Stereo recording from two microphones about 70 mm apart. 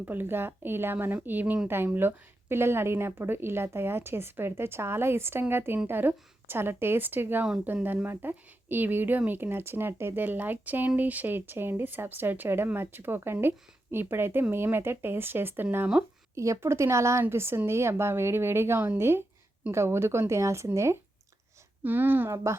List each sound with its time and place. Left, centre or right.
0.0 s speech: right
16.3 s a woman's voice: right
21.8 s speech: right